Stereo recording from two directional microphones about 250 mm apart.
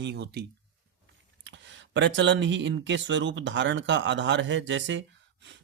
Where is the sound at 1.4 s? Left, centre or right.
Right.